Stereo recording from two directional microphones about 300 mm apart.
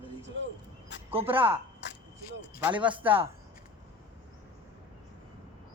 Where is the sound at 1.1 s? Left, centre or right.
Centre.